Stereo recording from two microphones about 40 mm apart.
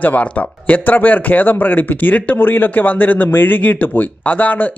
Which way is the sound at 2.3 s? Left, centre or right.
Left.